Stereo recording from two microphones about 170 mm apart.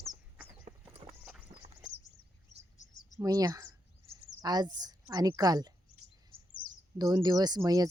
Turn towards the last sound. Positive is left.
turn(degrees=-20)  # may be behind; listen again after turning